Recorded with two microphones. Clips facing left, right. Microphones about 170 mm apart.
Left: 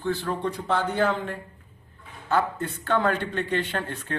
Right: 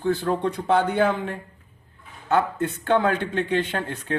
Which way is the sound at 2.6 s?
50° right (ahead or behind).